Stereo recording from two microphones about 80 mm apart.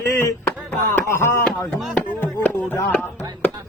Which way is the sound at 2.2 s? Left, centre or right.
Left.